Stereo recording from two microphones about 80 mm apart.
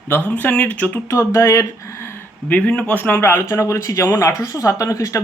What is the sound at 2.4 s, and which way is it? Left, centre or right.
Speech, centre.